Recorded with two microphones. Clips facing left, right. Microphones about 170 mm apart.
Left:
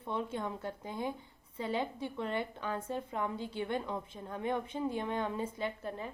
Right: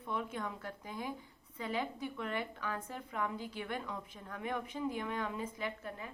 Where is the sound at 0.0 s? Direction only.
25° left (ahead or behind).